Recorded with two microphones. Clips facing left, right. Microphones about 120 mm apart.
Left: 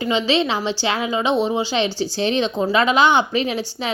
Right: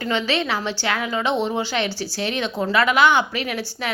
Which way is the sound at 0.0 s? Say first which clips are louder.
Left 4 dB; 15° left (ahead or behind).